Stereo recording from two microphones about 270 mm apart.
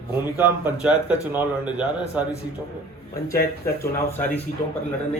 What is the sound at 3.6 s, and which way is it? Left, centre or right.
Speech, centre.